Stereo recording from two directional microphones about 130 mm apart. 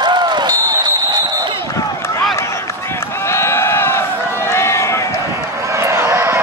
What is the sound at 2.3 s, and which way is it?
Run, 20° left (ahead or behind).